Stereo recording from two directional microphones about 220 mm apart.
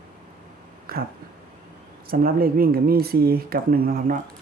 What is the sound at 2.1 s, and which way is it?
Speech, 40° right (ahead or behind).